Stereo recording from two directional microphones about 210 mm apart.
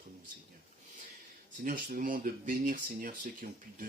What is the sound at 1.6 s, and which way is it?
Speech, 40° right (ahead or behind).